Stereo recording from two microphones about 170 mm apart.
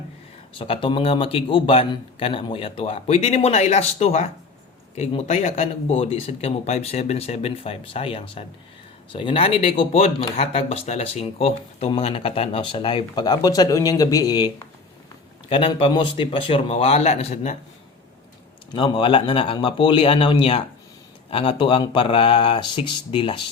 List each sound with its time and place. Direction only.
0.6 s speech: 30° left (ahead or behind)
18.7 s speech: 30° left (ahead or behind)